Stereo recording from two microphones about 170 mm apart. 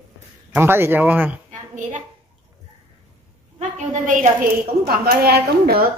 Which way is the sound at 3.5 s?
45° right (ahead or behind).